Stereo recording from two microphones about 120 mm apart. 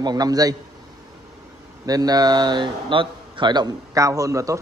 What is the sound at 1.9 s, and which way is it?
A man's voice, 30° right (ahead or behind).